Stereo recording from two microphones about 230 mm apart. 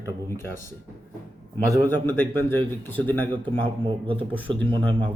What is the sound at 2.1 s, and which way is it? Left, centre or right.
Speech, centre.